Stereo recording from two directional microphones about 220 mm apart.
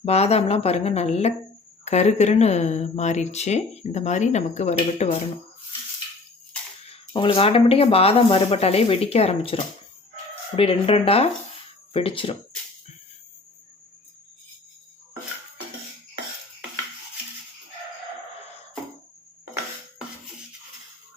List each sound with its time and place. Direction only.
0.0 s speech: 30° left (ahead or behind)
6.9 s speech: 25° left (ahead or behind)